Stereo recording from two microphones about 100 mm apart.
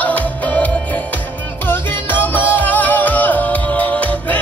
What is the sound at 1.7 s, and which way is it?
Music, 20° left (ahead or behind).